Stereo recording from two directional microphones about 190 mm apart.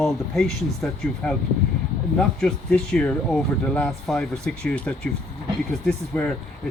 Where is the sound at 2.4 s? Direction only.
5° left (ahead or behind).